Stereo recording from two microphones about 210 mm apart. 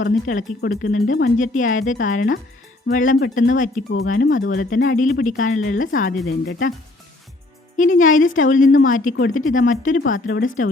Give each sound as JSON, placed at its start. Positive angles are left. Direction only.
{"t": 0.0, "sound": "speech", "side_deg": 40}
{"t": 7.8, "sound": "speech", "side_deg": 40}